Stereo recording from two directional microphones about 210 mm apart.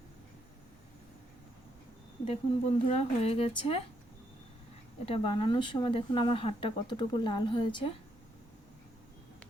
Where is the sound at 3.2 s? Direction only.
25° left (ahead or behind).